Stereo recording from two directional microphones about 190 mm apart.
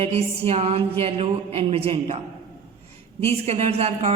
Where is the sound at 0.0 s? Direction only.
30° right (ahead or behind).